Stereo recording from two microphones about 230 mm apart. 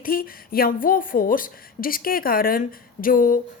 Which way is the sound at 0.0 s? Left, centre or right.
Left.